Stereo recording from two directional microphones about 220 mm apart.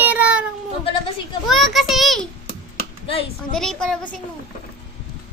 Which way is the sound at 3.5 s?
Centre (ahead or behind).